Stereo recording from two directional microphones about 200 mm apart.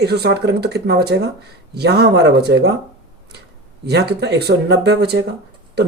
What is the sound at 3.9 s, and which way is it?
Speech, 55° right (ahead or behind).